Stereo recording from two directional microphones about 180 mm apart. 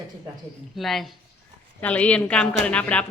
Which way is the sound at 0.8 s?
Centre (ahead or behind).